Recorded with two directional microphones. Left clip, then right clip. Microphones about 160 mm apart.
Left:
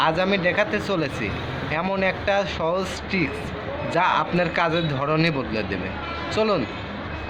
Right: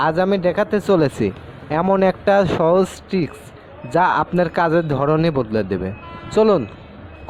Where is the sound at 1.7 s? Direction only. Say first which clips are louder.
Right 7 dB; 55° right (ahead or behind); by 2.5 s 70° right (ahead or behind).